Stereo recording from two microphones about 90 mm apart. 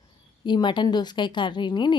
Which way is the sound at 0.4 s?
60° left (ahead or behind).